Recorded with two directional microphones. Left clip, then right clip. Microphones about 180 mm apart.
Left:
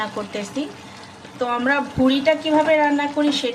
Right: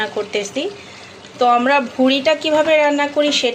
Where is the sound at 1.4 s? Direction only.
20° right (ahead or behind).